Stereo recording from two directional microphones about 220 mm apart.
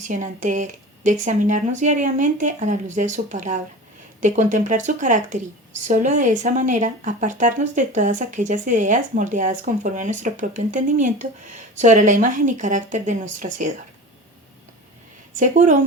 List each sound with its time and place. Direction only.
0.0 s speech: 35° right (ahead or behind)
15.4 s speech: 35° right (ahead or behind)